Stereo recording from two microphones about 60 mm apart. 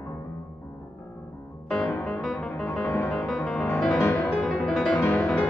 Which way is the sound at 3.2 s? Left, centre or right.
Centre.